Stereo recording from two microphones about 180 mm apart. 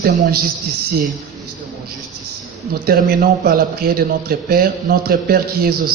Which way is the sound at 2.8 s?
50° right (ahead or behind).